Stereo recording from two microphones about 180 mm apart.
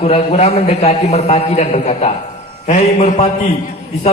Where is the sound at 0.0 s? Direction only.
35° left (ahead or behind).